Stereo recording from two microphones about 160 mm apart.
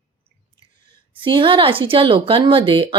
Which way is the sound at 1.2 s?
30° right (ahead or behind).